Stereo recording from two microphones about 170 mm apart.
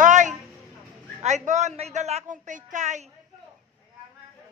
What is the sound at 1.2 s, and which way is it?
A woman's voice, 45° right (ahead or behind).